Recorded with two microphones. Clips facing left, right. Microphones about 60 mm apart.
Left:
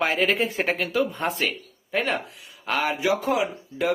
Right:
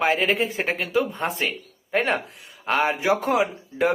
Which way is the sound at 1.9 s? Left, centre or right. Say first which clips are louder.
Right 3 dB; right.